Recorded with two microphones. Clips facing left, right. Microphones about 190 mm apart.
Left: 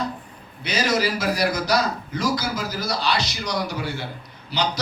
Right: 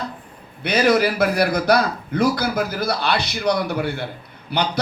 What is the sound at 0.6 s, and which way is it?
A man's voice, 60° right (ahead or behind).